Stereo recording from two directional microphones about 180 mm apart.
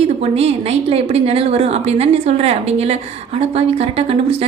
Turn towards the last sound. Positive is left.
turn(degrees=-35)  # may be behind; listen again after turning